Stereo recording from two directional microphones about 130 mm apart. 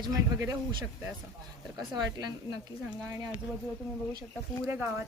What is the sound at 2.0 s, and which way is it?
Speech, 30° right (ahead or behind).